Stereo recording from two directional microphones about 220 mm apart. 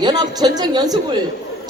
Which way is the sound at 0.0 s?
20° right (ahead or behind).